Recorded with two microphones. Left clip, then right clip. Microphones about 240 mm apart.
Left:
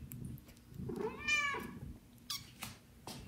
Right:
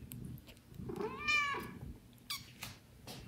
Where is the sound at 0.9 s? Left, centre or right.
Right.